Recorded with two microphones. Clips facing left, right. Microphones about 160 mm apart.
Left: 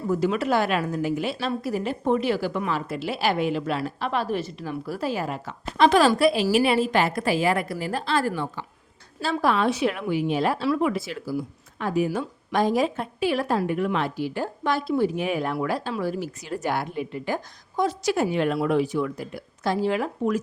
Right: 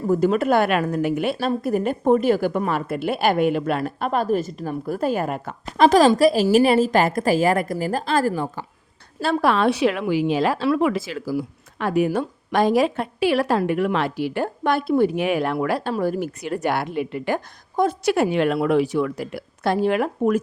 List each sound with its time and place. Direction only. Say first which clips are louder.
0.1 s a woman's voice: right 5 dB; 50° right (ahead or behind)
9.2 s a woman's voice: right 4 dB; 65° right (ahead or behind)
15.9 s a woman's voice: right 5 dB; 50° right (ahead or behind)